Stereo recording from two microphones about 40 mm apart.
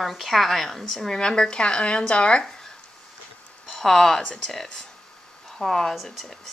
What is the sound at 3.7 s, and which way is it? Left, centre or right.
Speech, centre.